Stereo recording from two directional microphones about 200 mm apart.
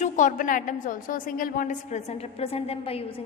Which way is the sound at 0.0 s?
40° left (ahead or behind).